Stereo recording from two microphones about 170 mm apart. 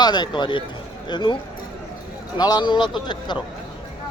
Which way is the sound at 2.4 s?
25° left (ahead or behind).